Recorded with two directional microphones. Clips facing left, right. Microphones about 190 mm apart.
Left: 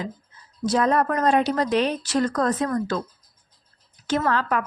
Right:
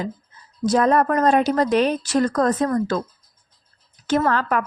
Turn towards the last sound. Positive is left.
turn(degrees=-50)  # may be behind; listen again after turning